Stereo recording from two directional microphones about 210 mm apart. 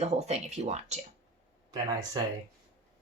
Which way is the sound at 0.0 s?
30° right (ahead or behind).